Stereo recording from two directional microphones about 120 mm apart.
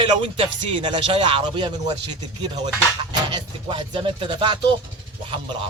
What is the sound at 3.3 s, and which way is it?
Speech, 40° right (ahead or behind).